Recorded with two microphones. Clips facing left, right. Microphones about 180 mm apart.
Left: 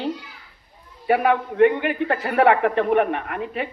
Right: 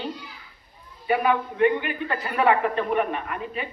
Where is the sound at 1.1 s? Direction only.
70° left (ahead or behind).